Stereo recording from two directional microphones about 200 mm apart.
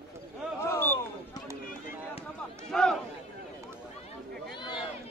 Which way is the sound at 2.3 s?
Centre (ahead or behind).